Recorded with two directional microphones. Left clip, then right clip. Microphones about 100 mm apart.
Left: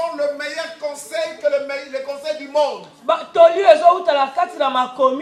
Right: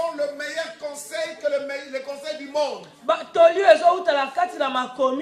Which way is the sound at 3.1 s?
5° right (ahead or behind).